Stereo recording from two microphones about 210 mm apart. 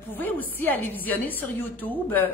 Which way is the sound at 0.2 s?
10° left (ahead or behind).